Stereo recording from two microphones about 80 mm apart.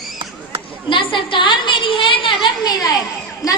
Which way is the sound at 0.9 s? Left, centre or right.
Left.